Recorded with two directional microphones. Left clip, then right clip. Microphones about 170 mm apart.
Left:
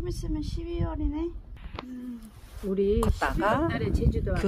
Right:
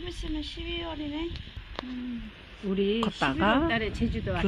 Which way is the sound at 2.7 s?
25° right (ahead or behind).